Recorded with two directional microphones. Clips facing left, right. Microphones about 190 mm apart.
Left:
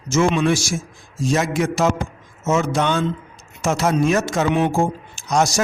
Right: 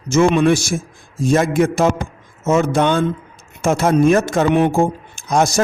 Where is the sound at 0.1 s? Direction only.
55° right (ahead or behind).